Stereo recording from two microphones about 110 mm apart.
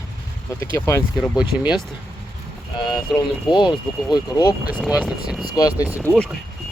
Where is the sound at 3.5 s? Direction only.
45° left (ahead or behind).